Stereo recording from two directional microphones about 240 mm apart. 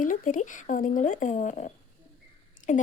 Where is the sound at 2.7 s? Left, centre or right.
Left.